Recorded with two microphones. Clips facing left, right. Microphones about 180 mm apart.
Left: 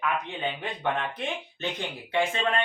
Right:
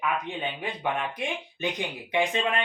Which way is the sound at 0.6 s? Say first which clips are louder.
Even; 10° right (ahead or behind).